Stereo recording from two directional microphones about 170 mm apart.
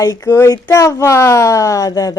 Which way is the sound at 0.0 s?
20° left (ahead or behind).